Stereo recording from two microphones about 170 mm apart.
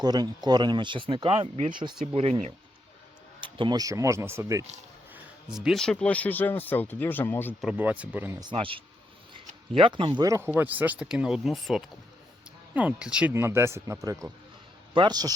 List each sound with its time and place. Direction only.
0.0 s speech: 25° right (ahead or behind)
1.7 s speech: 30° right (ahead or behind)
2.1 s speech: 40° right (ahead or behind)
3.4 s speech: 25° right (ahead or behind)
5.1 s speech: 5° right (ahead or behind); by 7.5 s 10° left (ahead or behind)
7.6 s speech: 10° right (ahead or behind)
8.4 s speech: 30° right (ahead or behind)